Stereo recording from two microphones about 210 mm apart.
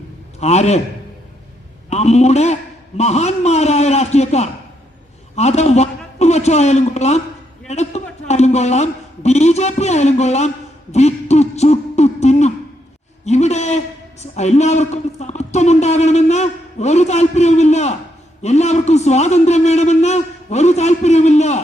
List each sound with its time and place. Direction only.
0.3 s a man's voice: 30° left (ahead or behind)
1.9 s a man's voice: 30° left (ahead or behind)
10.9 s a sound: 30° left (ahead or behind)
13.2 s a man's voice: 30° left (ahead or behind)